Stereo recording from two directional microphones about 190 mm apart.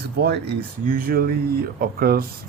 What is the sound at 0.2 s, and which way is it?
Speech, 60° right (ahead or behind).